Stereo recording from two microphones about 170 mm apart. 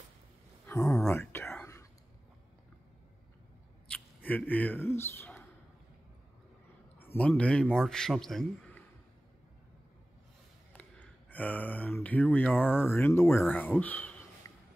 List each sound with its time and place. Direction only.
0.7 s a sound: 15° left (ahead or behind)
1.0 s whispering: 10° left (ahead or behind)
3.9 s speech: 10° left (ahead or behind)
7.0 s a man's voice: 10° left (ahead or behind)
10.7 s speech: 10° left (ahead or behind)